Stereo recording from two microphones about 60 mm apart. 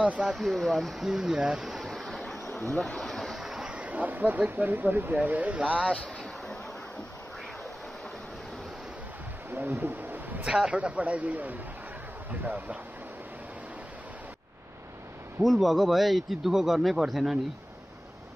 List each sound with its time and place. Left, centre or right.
0.0 s speech: right
0.3 s a man's voice: centre
1.7 s waves: centre
2.1 s a sound: centre; by 5.1 s right
5.2 s a man's voice: right
9.5 s a sound: right
10.4 s a man's voice: centre
15.4 s a man's voice: centre